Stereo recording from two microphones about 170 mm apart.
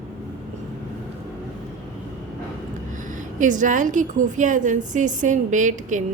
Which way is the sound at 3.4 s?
50° right (ahead or behind).